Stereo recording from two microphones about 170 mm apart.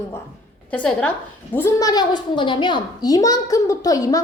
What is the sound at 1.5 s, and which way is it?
A child's voice, 20° left (ahead or behind).